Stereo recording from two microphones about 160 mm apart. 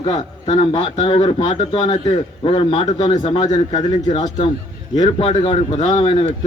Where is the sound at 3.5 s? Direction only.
40° left (ahead or behind).